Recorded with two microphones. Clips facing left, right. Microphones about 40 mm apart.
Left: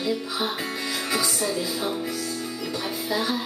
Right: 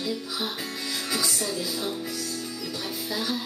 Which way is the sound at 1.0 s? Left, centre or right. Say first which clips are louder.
Left 3 dB; centre.